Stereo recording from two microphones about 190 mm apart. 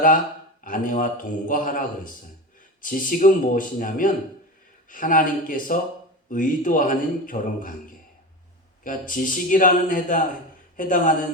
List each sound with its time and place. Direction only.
0.6 s a man's voice: 45° left (ahead or behind)
2.8 s a man's voice: 45° left (ahead or behind)